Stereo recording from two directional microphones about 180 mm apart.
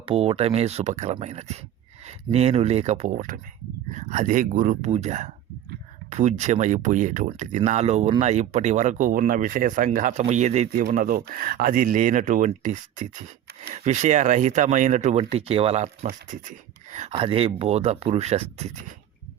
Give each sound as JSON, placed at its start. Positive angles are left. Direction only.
{"t": 0.0, "sound": "speech", "side_deg": -30}
{"t": 10.8, "sound": "speech", "side_deg": -55}
{"t": 16.0, "sound": "speech", "side_deg": -45}